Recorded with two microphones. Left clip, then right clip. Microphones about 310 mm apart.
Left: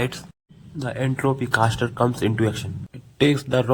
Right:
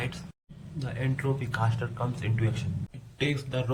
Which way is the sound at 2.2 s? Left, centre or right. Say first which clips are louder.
Left 12 dB; centre.